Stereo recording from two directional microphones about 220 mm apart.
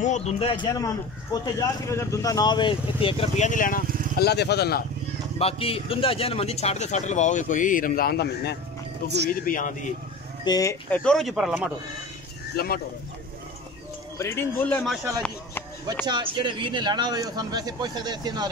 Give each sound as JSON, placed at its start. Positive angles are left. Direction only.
{"t": 0.0, "sound": "speech", "side_deg": 30}
{"t": 5.4, "sound": "speech", "side_deg": 25}
{"t": 9.0, "sound": "speech", "side_deg": -50}
{"t": 9.3, "sound": "speech", "side_deg": 40}
{"t": 10.4, "sound": "speech", "side_deg": 15}
{"t": 12.5, "sound": "speech", "side_deg": 45}
{"t": 14.1, "sound": "speech", "side_deg": 10}
{"t": 16.1, "sound": "a man's voice", "side_deg": -20}